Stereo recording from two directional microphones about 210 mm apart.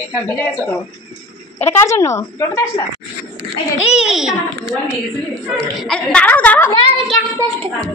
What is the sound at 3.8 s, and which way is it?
A woman's voice, 5° right (ahead or behind).